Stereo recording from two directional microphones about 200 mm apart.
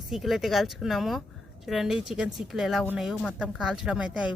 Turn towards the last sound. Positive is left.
turn(degrees=-5)  # may be behind; listen again after turning